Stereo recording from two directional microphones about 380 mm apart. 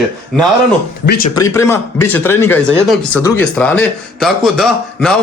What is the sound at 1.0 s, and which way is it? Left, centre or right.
Speech, left.